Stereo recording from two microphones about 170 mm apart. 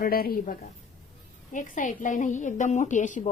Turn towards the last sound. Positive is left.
turn(degrees=45)  # may be behind; listen again after turning